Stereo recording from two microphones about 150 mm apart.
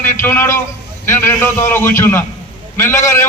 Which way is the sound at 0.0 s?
15° left (ahead or behind).